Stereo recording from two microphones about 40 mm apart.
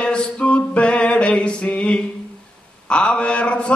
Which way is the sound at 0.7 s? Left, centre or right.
Left.